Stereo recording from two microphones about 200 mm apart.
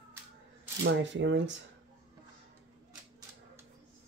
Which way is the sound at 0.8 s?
65° right (ahead or behind).